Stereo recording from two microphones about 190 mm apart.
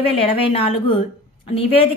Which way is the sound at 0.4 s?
30° left (ahead or behind).